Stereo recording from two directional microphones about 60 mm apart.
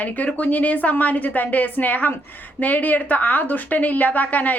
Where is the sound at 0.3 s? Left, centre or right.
Left.